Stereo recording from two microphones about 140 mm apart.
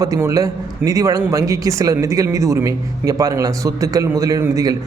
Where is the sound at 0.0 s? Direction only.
25° right (ahead or behind).